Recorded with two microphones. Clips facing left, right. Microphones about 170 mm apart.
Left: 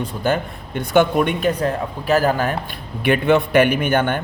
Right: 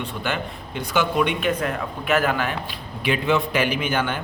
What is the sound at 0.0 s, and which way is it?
Speech, 45° left (ahead or behind).